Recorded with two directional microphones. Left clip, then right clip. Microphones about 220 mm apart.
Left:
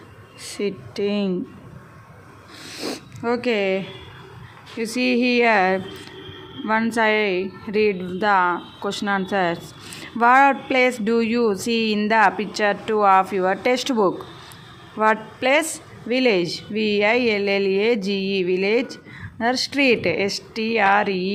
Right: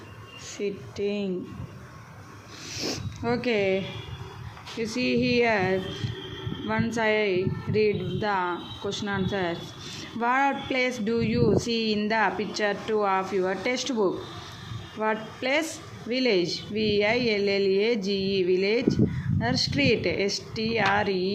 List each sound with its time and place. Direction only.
0.5 s speech: 25° left (ahead or behind)
2.7 s speech: 15° left (ahead or behind)